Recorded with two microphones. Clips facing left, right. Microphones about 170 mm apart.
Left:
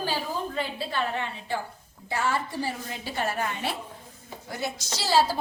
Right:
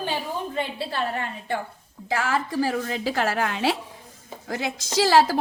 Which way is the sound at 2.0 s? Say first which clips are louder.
Right 3 dB; 90° right.